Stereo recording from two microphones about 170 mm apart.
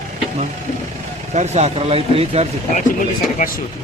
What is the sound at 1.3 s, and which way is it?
Speech, 40° right (ahead or behind).